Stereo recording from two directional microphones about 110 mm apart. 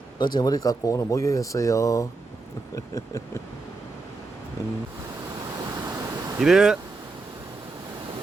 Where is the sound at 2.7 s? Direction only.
30° left (ahead or behind).